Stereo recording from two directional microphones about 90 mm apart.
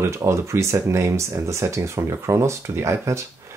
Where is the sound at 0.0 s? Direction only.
35° right (ahead or behind).